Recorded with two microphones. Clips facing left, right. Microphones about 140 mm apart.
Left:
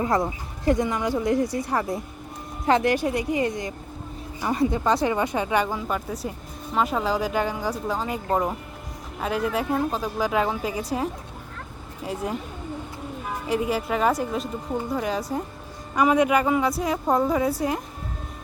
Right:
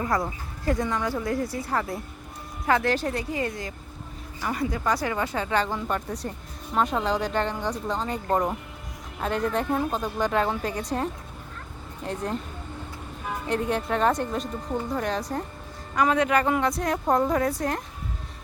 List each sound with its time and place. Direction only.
0.0 s speech: 20° left (ahead or behind)